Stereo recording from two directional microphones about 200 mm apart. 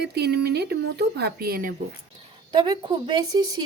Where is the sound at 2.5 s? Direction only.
20° right (ahead or behind).